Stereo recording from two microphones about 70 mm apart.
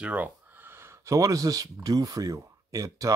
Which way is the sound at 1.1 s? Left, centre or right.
Right.